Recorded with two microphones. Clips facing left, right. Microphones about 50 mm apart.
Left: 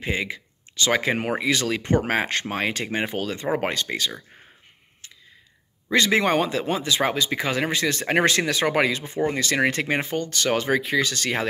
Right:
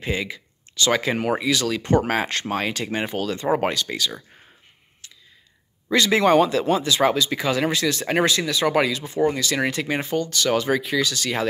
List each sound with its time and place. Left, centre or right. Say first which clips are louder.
0.0 s speech: even; left
5.9 s speech: right 2 dB; left
8.3 s speech: even; left
8.6 s speech: right 4 dB; left
9.3 s speech: left 1 dB; left